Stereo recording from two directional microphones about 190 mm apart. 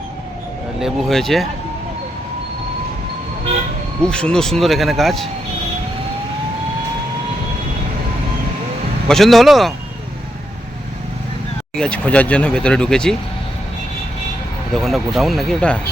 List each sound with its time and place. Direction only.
0.8 s speech: centre (ahead or behind)
4.0 s speech: 5° left (ahead or behind)
9.0 s speech: centre (ahead or behind)
11.8 s speech: 5° left (ahead or behind)
14.8 s speech: centre (ahead or behind)